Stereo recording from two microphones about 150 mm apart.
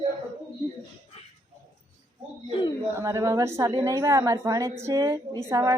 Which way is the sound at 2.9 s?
20° right (ahead or behind).